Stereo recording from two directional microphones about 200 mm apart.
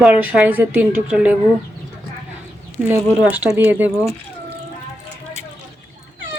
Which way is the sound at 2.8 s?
5° right (ahead or behind).